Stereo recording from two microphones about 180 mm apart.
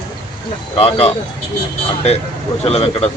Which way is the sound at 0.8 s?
35° left (ahead or behind).